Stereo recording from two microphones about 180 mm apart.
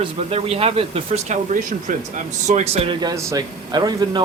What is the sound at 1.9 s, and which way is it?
Speech, 45° right (ahead or behind).